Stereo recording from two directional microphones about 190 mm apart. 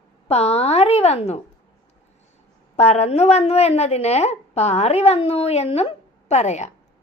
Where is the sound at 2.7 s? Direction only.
35° left (ahead or behind).